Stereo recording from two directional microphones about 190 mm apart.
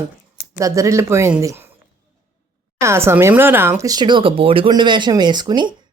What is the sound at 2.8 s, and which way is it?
Speech, 15° right (ahead or behind).